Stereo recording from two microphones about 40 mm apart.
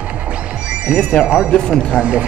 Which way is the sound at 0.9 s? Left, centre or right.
Left.